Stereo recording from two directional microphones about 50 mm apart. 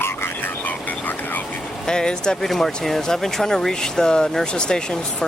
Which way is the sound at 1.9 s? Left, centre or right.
Centre.